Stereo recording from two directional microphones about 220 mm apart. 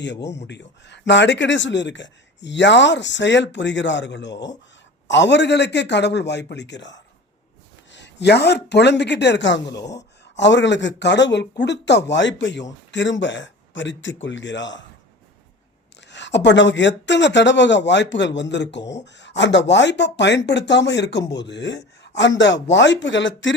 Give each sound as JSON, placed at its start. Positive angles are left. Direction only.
{"t": 0.0, "sound": "a man's voice", "side_deg": 50}
{"t": 9.6, "sound": "speech", "side_deg": 15}
{"t": 10.0, "sound": "a man's voice", "side_deg": 55}
{"t": 16.0, "sound": "a man's voice", "side_deg": 55}